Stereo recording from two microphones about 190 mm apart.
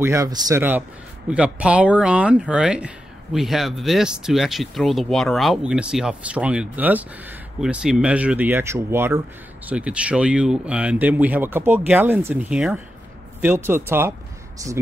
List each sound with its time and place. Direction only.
0.0 s speech: 15° right (ahead or behind)